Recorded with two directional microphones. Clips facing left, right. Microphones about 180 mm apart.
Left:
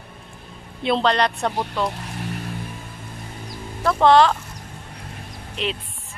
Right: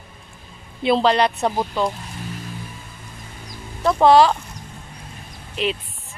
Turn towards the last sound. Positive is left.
turn(degrees=-5)  # may be behind; listen again after turning